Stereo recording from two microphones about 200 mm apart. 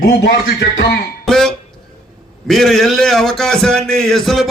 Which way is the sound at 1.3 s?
5° left (ahead or behind).